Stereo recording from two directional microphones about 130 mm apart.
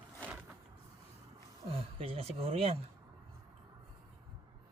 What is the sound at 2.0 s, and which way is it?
Speech, 50° right (ahead or behind).